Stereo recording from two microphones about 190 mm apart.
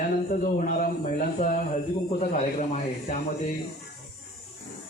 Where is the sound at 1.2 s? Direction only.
40° left (ahead or behind).